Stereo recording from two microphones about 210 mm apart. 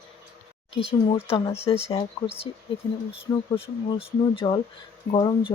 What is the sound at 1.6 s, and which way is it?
Speech, 25° left (ahead or behind).